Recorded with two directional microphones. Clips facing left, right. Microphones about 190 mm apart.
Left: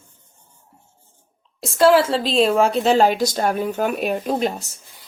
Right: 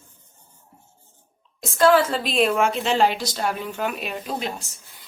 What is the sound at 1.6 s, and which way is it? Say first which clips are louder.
A woman's voice: left 3 dB; 30° left (ahead or behind).